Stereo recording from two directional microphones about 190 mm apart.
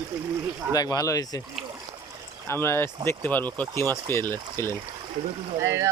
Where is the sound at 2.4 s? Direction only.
15° left (ahead or behind).